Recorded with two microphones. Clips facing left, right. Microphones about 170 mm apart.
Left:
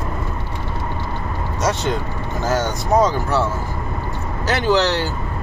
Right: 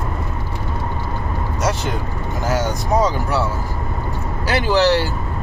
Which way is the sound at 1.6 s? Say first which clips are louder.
Left 2 dB; 5° right (ahead or behind).